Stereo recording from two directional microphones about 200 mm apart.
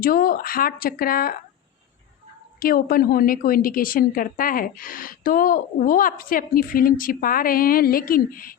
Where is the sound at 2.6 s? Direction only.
45° left (ahead or behind).